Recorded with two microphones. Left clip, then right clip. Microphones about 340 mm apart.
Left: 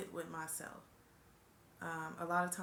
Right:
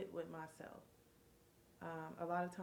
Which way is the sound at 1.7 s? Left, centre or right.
Right.